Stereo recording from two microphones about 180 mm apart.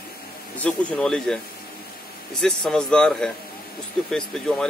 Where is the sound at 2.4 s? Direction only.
5° left (ahead or behind).